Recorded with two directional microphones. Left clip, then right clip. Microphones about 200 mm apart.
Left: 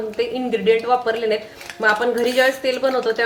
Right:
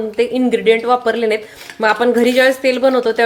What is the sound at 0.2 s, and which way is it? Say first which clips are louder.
Speech: right 7 dB; 40° right (ahead or behind).